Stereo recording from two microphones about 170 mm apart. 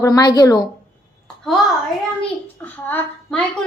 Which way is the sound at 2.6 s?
10° left (ahead or behind).